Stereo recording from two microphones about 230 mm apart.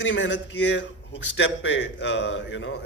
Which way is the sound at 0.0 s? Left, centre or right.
Left.